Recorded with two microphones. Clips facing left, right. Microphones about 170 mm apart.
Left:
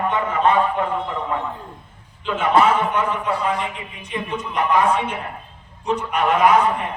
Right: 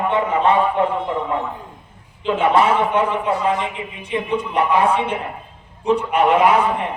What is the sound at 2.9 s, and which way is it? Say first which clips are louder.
Speech: right 3 dB; 25° right (ahead or behind).